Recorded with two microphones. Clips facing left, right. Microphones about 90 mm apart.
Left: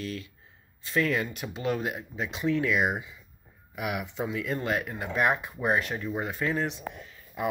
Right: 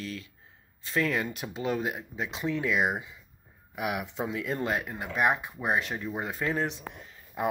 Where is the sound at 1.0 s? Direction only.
25° right (ahead or behind).